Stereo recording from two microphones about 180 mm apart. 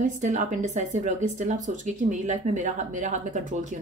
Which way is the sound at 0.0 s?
40° right (ahead or behind).